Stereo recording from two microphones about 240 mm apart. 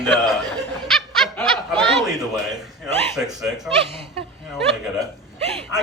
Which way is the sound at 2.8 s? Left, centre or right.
Centre.